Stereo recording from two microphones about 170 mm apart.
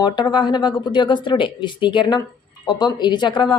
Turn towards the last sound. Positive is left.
turn(degrees=25)  # may be behind; listen again after turning